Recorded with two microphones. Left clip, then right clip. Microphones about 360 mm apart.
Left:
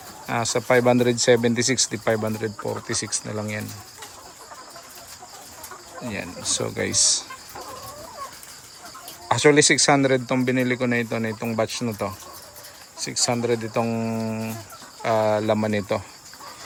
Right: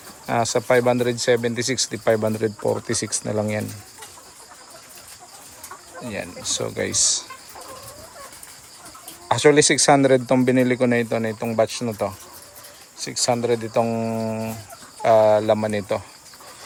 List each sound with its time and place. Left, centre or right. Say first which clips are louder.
0.3 s speech: right 2 dB; centre
6.1 s speech: right 1 dB; centre
9.3 s speech: right 1 dB; centre